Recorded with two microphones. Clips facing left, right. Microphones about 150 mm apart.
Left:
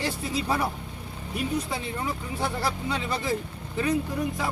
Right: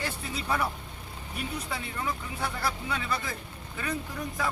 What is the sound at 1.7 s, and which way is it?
Speech, 30° left (ahead or behind).